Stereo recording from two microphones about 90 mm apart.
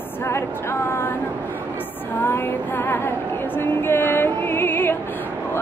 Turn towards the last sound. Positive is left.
turn(degrees=25)  # may be behind; listen again after turning